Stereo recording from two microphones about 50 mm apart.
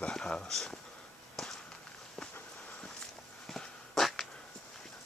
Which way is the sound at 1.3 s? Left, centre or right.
Centre.